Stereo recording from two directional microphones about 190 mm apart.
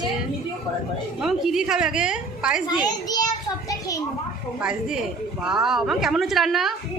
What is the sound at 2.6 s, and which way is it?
A child's voice, 20° left (ahead or behind).